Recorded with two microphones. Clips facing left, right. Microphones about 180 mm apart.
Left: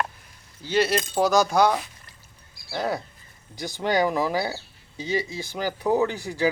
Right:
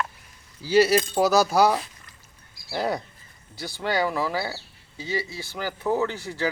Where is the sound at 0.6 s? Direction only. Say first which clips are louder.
Right 4 dB; 10° right (ahead or behind).